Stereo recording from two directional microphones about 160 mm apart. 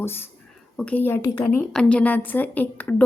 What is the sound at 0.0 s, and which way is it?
A woman's voice, 15° left (ahead or behind).